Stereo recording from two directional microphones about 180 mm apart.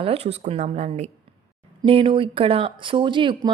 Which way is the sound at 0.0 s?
35° right (ahead or behind).